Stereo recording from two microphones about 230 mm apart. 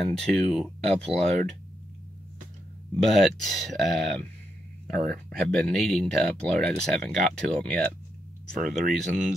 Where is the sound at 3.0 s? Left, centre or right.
Centre.